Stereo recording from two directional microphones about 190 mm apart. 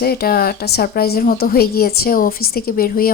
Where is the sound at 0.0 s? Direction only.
55° left (ahead or behind).